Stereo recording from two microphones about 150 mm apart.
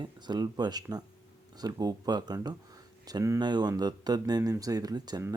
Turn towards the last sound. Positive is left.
turn(degrees=-25)  # may be behind; listen again after turning